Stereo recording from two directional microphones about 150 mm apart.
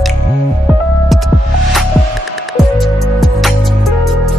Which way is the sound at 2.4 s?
Centre (ahead or behind).